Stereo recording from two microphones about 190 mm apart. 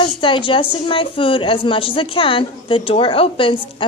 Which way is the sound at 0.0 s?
25° left (ahead or behind).